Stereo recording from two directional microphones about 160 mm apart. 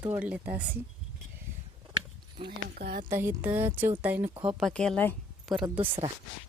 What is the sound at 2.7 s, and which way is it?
Speech, 65° right (ahead or behind).